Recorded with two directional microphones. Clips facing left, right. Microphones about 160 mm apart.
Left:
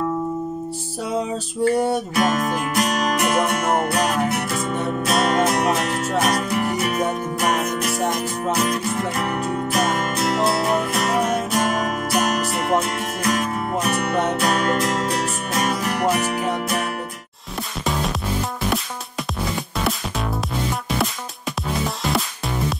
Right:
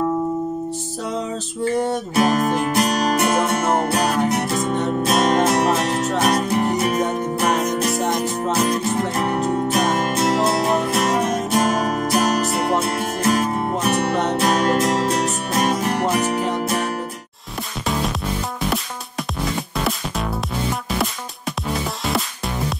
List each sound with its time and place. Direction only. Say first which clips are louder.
2.1 s music: right 7 dB; 35° right (ahead or behind)